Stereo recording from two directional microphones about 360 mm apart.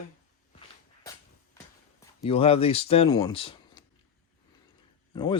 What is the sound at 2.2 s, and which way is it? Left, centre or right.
Speech, centre.